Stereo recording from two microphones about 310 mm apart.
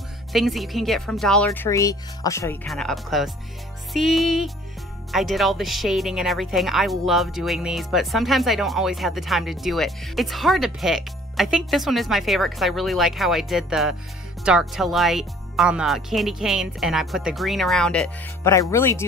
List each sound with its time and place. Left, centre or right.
0.3 s speech: centre